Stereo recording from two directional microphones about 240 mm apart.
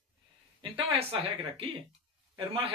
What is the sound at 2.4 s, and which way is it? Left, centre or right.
Speech, right.